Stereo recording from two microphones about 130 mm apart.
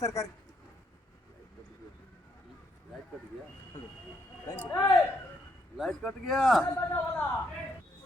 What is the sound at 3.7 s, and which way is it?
Train, 25° left (ahead or behind).